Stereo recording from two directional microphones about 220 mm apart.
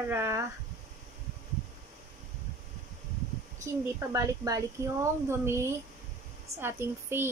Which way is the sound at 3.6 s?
15° right (ahead or behind).